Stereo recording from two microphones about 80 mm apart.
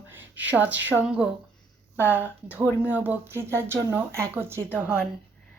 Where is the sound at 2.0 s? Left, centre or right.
Right.